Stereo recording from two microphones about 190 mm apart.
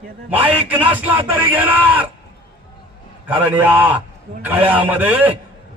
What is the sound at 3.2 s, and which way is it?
A man's voice, 10° right (ahead or behind).